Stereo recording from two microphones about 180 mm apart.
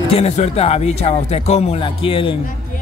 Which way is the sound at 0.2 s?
35° left (ahead or behind).